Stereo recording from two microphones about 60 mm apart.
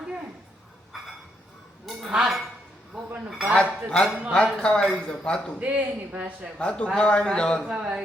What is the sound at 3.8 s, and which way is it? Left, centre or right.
A man's voice, centre.